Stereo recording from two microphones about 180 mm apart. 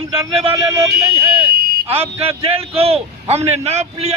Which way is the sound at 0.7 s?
15° right (ahead or behind).